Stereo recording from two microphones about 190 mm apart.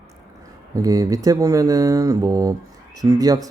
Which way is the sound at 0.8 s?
20° right (ahead or behind).